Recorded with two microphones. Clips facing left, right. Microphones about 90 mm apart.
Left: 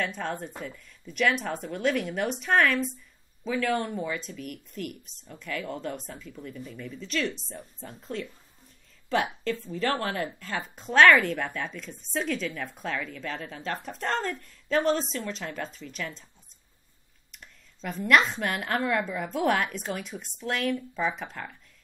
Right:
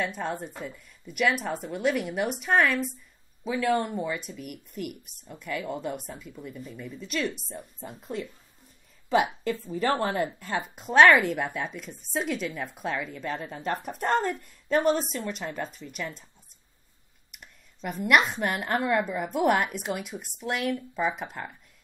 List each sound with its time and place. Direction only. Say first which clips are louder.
0.0 s speech: right 1 dB; 10° right (ahead or behind)
3.4 s a woman's voice: right 2 dB; 15° right (ahead or behind)
17.3 s speech: even; 10° right (ahead or behind)